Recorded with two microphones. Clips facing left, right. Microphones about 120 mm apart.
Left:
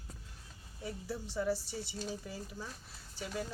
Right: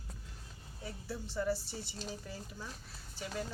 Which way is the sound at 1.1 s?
10° left (ahead or behind).